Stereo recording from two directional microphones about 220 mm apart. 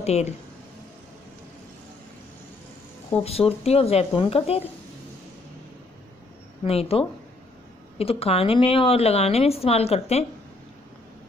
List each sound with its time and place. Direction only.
0.0 s speech: 30° left (ahead or behind)
3.3 s a woman's voice: 25° left (ahead or behind)
6.6 s a woman's voice: 25° left (ahead or behind)